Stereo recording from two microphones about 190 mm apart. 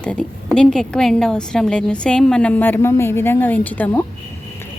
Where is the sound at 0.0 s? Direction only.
5° left (ahead or behind).